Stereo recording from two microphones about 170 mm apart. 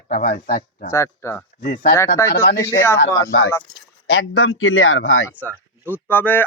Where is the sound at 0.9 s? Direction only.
15° left (ahead or behind).